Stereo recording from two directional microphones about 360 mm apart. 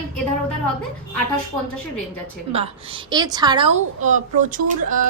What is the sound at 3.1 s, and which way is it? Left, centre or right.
A woman's voice, centre.